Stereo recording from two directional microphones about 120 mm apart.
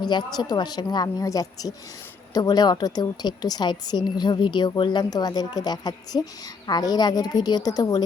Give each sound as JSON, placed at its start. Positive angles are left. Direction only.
{"t": 0.0, "sound": "a woman's voice", "side_deg": 40}